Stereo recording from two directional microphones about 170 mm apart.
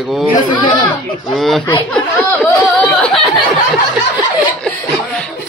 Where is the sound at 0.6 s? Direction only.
25° left (ahead or behind).